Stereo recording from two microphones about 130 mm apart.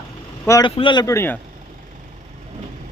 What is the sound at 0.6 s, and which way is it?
Speech, 35° left (ahead or behind).